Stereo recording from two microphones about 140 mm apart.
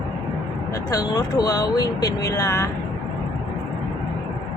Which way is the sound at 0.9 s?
25° left (ahead or behind).